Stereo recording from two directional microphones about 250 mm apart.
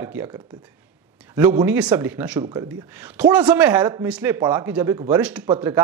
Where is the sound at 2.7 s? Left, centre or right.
Centre.